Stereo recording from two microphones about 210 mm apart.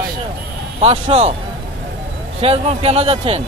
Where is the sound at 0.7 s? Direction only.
25° right (ahead or behind).